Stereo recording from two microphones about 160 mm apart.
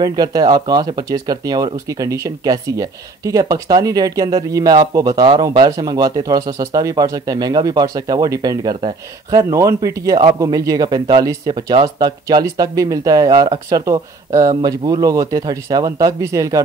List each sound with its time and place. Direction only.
0.0 s speech: 25° right (ahead or behind)